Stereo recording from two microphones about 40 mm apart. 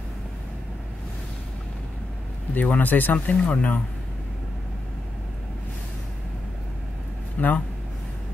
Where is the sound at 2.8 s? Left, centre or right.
Left.